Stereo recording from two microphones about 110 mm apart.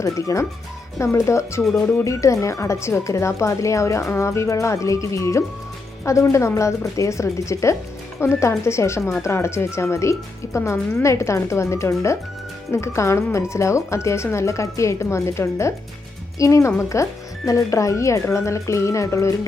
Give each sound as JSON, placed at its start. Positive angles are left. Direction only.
{"t": 0.0, "sound": "speech", "side_deg": 30}